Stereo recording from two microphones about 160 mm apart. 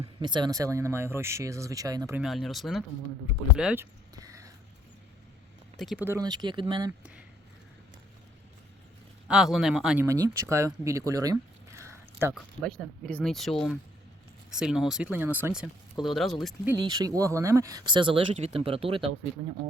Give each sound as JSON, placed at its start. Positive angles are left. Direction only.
{"t": 0.0, "sound": "speech", "side_deg": -30}
{"t": 2.1, "sound": "speech", "side_deg": 0}
{"t": 3.8, "sound": "a sound", "side_deg": -20}
{"t": 5.7, "sound": "speech", "side_deg": 0}
{"t": 6.1, "sound": "speech", "side_deg": -25}
{"t": 7.0, "sound": "a sound", "side_deg": -10}
{"t": 9.2, "sound": "speech", "side_deg": -5}
{"t": 10.0, "sound": "speech", "side_deg": -20}
{"t": 12.3, "sound": "speech", "side_deg": 5}
{"t": 16.0, "sound": "speech", "side_deg": 0}
{"t": 16.6, "sound": "speech", "side_deg": -25}